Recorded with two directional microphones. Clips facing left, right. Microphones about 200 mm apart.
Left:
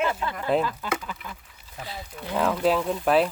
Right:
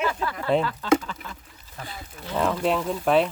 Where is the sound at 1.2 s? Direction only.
15° left (ahead or behind).